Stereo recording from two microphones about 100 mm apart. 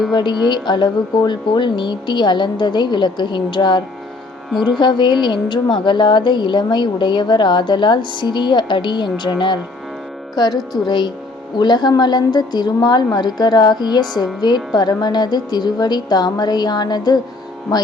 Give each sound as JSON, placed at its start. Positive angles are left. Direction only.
{"t": 0.1, "sound": "a woman's voice", "side_deg": 50}